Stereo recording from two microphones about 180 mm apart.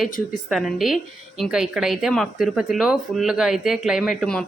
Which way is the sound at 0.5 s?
Centre (ahead or behind).